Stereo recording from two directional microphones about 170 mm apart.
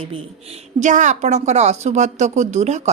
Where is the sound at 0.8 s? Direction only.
45° right (ahead or behind).